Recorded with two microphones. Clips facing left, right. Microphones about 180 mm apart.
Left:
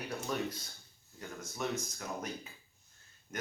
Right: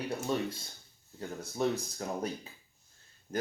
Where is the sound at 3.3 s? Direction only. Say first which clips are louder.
Right 6 dB; 30° right (ahead or behind).